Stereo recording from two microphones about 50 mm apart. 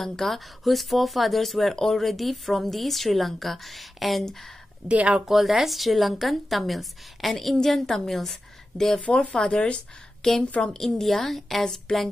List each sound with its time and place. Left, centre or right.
0.0 s speech: centre
4.8 s speech: right
5.2 s speech: centre; by 9.8 s left
10.2 s speech: centre